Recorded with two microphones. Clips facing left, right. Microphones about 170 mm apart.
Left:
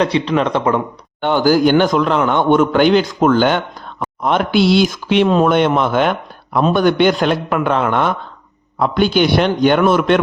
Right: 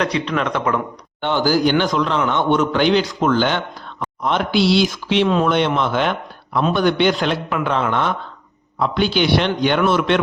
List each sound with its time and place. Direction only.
0.0 s speech: 30° left (ahead or behind)
1.2 s a man's voice: 50° left (ahead or behind)